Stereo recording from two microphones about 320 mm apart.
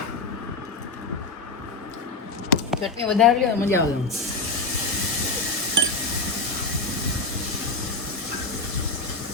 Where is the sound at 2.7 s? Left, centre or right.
Centre.